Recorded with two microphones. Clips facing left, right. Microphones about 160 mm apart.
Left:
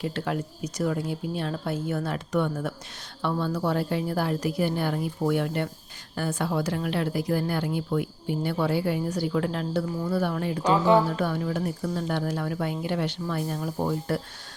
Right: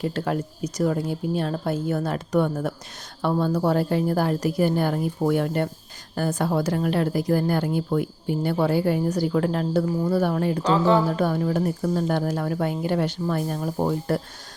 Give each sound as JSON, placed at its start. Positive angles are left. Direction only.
{"t": 0.0, "sound": "a woman's voice", "side_deg": -40}